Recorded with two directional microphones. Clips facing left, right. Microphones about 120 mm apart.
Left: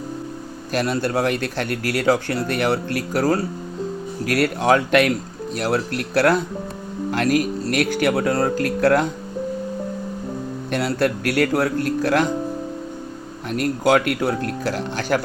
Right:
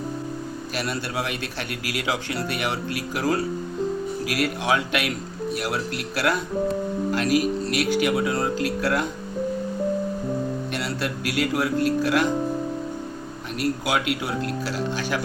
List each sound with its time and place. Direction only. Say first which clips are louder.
0.7 s speech: left 9 dB; 45° left (ahead or behind)
4.3 s speech: left 7 dB; 55° left (ahead or behind)
10.7 s speech: left 7 dB; 50° left (ahead or behind)
13.5 s speech: left 7 dB; 50° left (ahead or behind)